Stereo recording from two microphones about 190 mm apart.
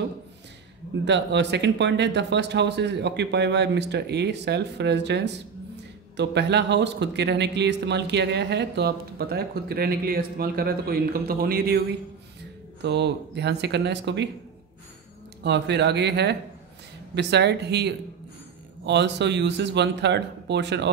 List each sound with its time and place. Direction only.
1.0 s speech: 65° right (ahead or behind)
12.8 s speech: 65° right (ahead or behind)
15.4 s speech: 65° right (ahead or behind)